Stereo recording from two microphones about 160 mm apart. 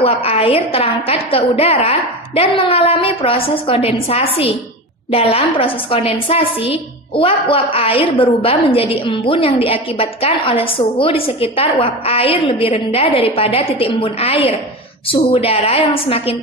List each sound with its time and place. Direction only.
0.0 s a woman's voice: 35° left (ahead or behind)